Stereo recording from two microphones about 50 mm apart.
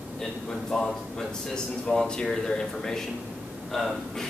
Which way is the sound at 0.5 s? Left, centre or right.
Centre.